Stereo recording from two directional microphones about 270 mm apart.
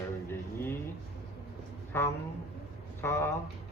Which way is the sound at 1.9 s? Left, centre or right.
Centre.